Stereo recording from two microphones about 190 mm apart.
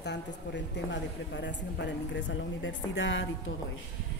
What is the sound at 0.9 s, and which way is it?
Speech, 70° left (ahead or behind).